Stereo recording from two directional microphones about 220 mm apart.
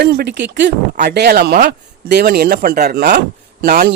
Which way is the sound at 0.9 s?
45° right (ahead or behind).